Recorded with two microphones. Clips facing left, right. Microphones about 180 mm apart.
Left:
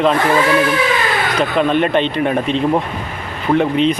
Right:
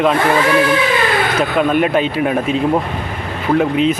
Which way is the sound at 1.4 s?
5° right (ahead or behind).